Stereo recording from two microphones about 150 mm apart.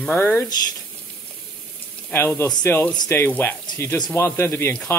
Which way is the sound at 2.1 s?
15° left (ahead or behind).